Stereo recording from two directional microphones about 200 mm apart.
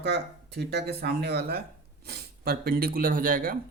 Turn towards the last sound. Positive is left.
turn(degrees=-45)  # may be behind; listen again after turning